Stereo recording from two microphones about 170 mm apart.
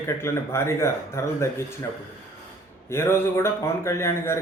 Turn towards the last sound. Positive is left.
turn(degrees=15)  # may be behind; listen again after turning